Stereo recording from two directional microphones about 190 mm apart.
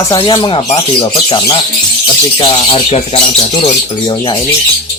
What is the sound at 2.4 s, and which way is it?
Speech, 25° left (ahead or behind).